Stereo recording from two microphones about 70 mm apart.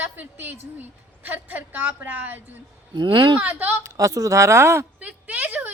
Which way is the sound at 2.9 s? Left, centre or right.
Right.